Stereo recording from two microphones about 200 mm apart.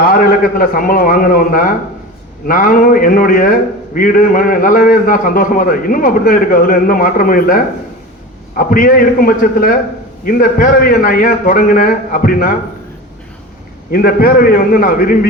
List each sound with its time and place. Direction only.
0.0 s a man's voice: 45° left (ahead or behind)
13.9 s a man's voice: 45° left (ahead or behind)